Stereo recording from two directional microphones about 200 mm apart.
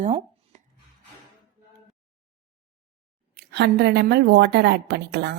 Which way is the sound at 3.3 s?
55° right (ahead or behind).